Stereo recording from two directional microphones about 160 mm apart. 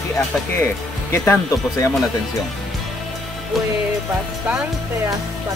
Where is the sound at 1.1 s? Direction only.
15° left (ahead or behind).